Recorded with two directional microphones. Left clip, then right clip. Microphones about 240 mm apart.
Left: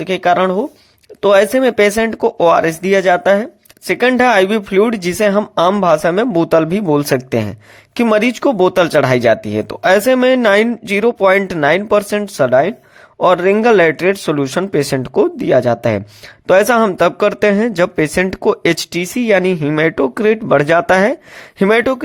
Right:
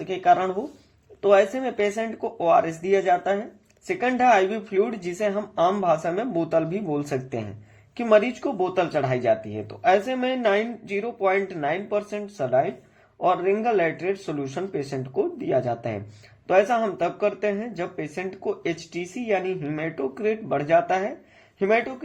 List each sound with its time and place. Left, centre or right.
0.0 s speech: left